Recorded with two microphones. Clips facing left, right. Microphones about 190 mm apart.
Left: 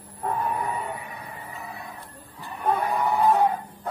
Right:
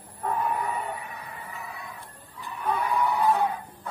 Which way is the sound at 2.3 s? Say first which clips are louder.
Left 3 dB; 50° left (ahead or behind).